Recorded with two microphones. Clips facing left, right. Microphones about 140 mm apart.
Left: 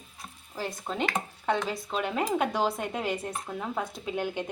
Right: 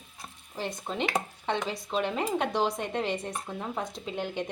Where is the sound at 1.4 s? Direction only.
5° left (ahead or behind).